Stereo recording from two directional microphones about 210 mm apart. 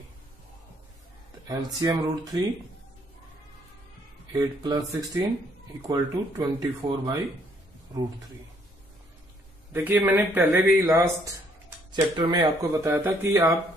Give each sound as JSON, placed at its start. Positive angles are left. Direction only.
{"t": 1.8, "sound": "speech", "side_deg": -20}
{"t": 4.3, "sound": "speech", "side_deg": -15}
{"t": 9.7, "sound": "speech", "side_deg": -10}